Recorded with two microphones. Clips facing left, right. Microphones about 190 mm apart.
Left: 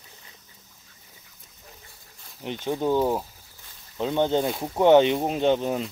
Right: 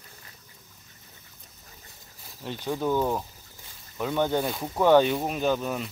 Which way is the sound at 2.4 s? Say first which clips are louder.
Left 3 dB; 20° left (ahead or behind).